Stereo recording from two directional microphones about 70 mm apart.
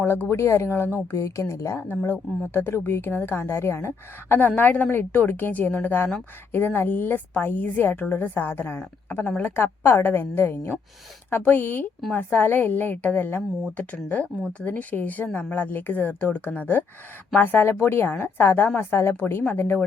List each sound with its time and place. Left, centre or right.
0.0 s a woman's voice: left
9.4 s a woman's voice: left